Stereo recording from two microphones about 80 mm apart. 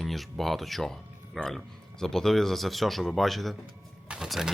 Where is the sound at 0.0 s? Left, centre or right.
Centre.